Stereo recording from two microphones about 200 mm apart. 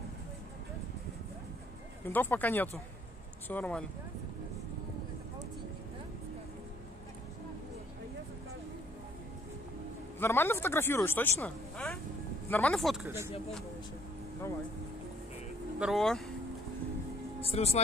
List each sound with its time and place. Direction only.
2.0 s speech: 10° left (ahead or behind)
10.1 s speech: 10° left (ahead or behind)
13.0 s speech: 15° right (ahead or behind)
15.8 s speech: centre (ahead or behind)
17.4 s speech: 30° left (ahead or behind)